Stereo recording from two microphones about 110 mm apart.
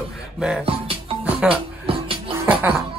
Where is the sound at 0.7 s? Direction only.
60° right (ahead or behind).